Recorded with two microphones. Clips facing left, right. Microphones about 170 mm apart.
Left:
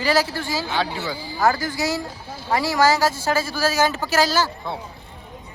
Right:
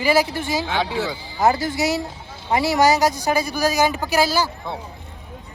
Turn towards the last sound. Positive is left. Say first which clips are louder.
# even
turn(degrees=-15)  # may be behind; listen again after turning